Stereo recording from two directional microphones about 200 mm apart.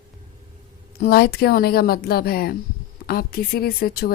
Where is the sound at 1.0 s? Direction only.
50° left (ahead or behind).